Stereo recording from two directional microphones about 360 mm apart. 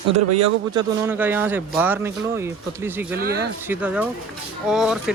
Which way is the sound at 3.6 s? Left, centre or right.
Centre.